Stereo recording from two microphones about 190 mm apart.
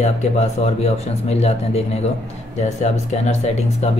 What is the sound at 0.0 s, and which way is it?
Speech, 35° left (ahead or behind).